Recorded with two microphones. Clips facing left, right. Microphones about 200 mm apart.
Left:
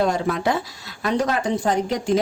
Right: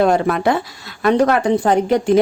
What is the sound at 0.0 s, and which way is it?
Speech, 65° right (ahead or behind).